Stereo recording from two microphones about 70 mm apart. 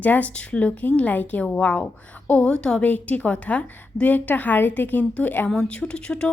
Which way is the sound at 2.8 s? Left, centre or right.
Left.